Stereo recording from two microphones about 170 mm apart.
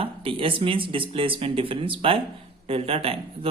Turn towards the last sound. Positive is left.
turn(degrees=-35)  # may be behind; listen again after turning